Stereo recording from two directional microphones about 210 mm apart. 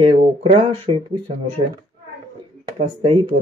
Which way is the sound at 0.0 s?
30° right (ahead or behind).